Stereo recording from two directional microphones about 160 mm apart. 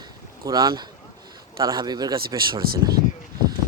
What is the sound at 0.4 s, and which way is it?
Speech, 25° right (ahead or behind).